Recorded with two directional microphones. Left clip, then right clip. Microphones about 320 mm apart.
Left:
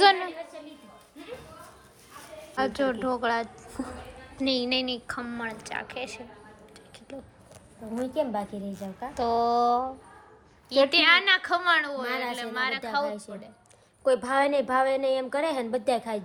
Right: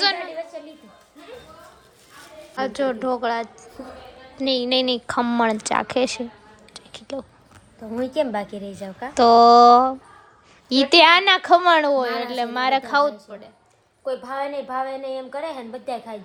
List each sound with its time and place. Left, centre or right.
0.0 s a sound: centre
0.5 s music: right
2.6 s a woman's voice: centre
7.9 s a woman's voice: right; by 12.8 s centre
14.0 s a woman's voice: left